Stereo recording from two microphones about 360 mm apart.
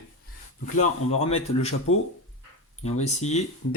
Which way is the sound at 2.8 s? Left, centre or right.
Centre.